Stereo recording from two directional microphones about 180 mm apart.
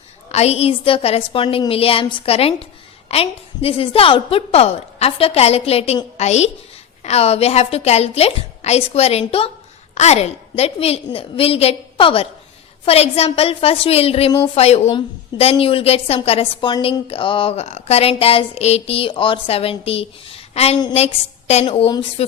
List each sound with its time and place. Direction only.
0.3 s a woman's voice: 35° left (ahead or behind)